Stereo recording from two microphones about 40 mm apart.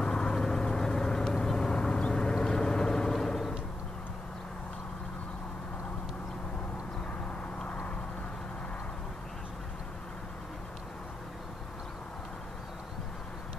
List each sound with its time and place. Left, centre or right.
0.0 s vehicle: left